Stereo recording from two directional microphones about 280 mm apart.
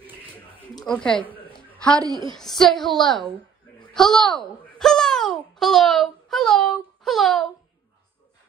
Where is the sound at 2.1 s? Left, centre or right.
Centre.